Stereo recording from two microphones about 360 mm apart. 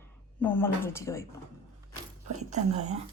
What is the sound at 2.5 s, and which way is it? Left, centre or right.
Speech, centre.